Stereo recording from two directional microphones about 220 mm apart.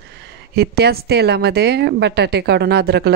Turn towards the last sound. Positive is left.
turn(degrees=-50)  # may be behind; listen again after turning